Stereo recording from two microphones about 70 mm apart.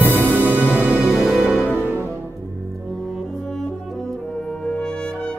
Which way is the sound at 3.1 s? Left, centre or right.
Centre.